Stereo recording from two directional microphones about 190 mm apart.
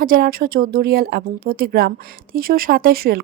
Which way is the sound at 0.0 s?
50° right (ahead or behind).